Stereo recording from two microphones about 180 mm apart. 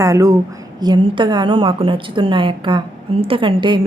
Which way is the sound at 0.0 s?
20° right (ahead or behind).